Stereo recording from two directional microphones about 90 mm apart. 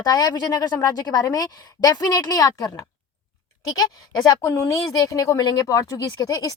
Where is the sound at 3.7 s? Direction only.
45° left (ahead or behind).